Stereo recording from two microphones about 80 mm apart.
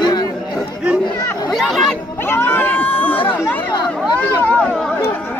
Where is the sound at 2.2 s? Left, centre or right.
Left.